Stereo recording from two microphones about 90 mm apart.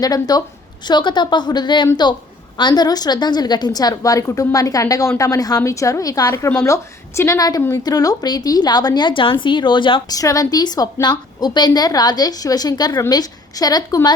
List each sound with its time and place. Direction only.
0.0 s a woman's voice: 45° left (ahead or behind); by 10.0 s 65° left (ahead or behind)
10.1 s a woman's voice: 40° left (ahead or behind)